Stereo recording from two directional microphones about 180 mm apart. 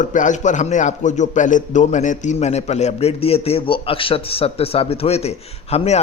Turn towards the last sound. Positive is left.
turn(degrees=35)  # may be behind; listen again after turning